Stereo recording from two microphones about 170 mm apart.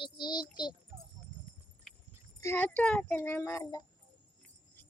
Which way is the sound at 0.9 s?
30° right (ahead or behind).